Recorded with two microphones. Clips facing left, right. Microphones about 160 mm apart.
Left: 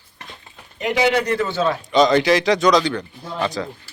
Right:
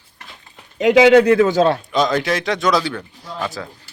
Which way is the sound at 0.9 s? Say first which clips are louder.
Right 8 dB; 90° right.